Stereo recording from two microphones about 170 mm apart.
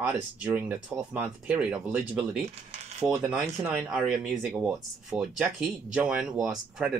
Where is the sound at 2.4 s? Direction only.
40° right (ahead or behind).